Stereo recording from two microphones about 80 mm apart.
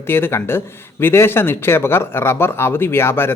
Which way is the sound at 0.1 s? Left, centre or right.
Left.